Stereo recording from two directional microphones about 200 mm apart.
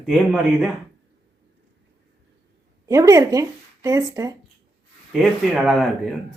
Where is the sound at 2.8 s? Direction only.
15° right (ahead or behind).